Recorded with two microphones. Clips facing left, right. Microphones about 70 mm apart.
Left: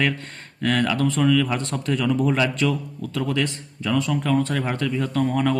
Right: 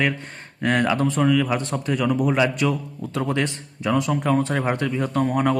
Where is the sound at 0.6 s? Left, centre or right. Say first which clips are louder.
Right 1 dB; right.